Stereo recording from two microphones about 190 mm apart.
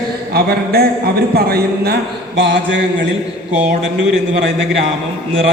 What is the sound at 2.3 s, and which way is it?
Speech, 65° right (ahead or behind).